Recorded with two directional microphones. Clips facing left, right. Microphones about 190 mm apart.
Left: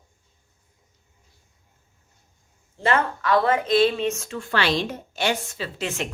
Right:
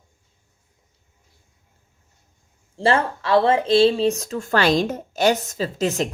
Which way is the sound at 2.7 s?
30° right (ahead or behind).